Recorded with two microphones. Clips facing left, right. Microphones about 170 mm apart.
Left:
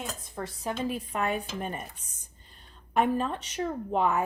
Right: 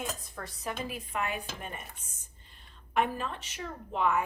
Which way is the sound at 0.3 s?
25° left (ahead or behind).